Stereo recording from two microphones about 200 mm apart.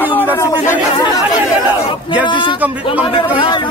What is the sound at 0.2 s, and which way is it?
Chatter, 10° left (ahead or behind).